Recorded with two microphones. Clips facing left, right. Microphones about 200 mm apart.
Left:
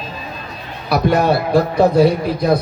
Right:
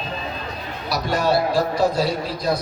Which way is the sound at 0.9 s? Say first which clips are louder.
Left 6 dB; 55° left (ahead or behind).